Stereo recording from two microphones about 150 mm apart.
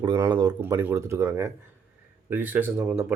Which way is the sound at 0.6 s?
15° right (ahead or behind).